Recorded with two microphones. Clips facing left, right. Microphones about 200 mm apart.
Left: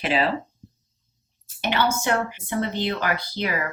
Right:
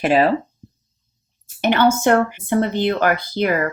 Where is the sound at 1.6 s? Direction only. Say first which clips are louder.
Right 8 dB; 50° right (ahead or behind).